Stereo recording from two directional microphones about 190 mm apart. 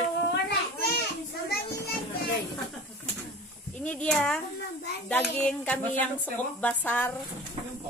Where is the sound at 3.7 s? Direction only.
5° left (ahead or behind).